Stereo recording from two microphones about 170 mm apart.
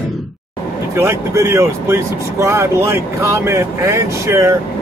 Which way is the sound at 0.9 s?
15° right (ahead or behind).